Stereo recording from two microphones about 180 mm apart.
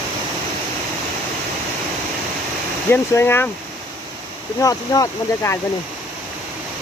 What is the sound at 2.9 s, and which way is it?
Speech, 15° left (ahead or behind).